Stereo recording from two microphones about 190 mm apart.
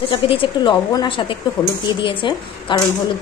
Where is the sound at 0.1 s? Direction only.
25° left (ahead or behind).